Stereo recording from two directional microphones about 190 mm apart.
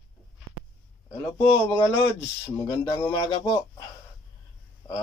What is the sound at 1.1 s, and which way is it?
Speech, 15° left (ahead or behind).